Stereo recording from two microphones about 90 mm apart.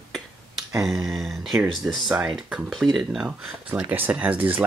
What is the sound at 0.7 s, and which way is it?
Speech, 5° right (ahead or behind).